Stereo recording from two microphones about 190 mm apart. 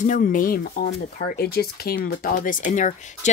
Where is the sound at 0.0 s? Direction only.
45° left (ahead or behind).